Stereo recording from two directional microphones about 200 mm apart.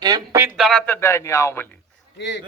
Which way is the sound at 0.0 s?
20° right (ahead or behind).